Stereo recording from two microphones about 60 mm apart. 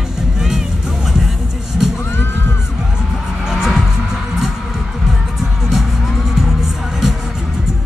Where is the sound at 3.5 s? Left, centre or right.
Centre.